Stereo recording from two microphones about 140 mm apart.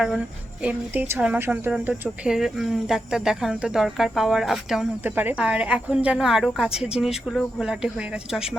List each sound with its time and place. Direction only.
0.6 s speech: 10° right (ahead or behind)